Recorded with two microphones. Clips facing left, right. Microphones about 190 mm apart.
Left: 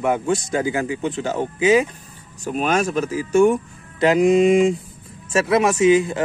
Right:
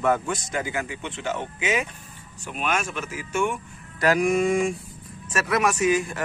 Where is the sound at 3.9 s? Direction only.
20° left (ahead or behind).